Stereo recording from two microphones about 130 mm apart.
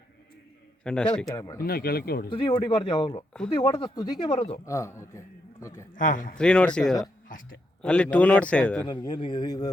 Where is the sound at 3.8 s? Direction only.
35° left (ahead or behind).